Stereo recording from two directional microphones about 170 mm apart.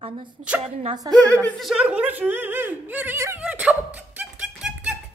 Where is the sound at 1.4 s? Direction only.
Centre (ahead or behind).